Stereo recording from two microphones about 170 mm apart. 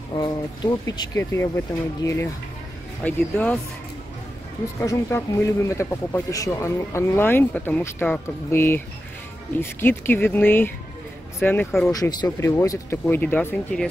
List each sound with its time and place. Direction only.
0.1 s speech: 25° left (ahead or behind)
3.0 s speech: 10° left (ahead or behind)
4.8 s speech: 15° left (ahead or behind)
11.9 s speech: 20° left (ahead or behind)